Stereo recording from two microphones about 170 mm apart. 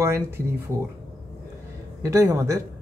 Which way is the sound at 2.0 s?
20° right (ahead or behind).